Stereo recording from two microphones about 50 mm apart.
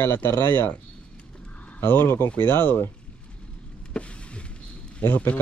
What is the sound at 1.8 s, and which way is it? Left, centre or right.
Speech, left.